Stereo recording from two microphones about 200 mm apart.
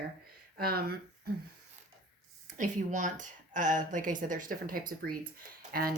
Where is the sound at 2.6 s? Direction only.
40° right (ahead or behind).